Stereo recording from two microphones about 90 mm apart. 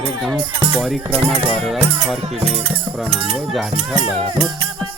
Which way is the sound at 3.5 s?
Centre (ahead or behind).